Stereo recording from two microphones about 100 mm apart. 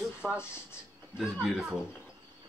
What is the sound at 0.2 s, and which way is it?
Speech, 10° right (ahead or behind).